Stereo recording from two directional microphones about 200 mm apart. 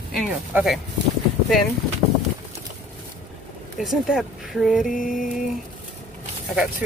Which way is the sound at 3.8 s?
Centre (ahead or behind).